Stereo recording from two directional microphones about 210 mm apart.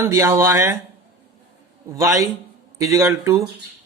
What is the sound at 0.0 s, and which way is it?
Speech, 15° right (ahead or behind).